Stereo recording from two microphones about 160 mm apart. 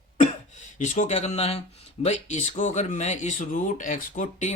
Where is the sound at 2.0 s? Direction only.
45° left (ahead or behind).